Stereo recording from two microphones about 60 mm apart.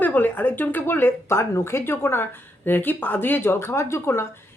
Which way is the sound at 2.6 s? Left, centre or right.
Left.